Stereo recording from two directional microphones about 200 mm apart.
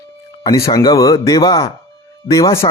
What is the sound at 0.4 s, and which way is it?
A man's voice, 20° left (ahead or behind).